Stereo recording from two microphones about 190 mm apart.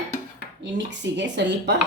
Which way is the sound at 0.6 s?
70° right (ahead or behind).